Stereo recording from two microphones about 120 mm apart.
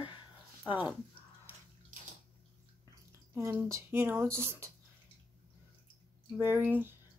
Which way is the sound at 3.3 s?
25° right (ahead or behind).